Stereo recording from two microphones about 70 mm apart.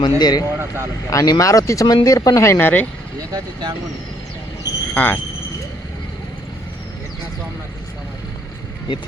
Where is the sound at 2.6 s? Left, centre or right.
Left.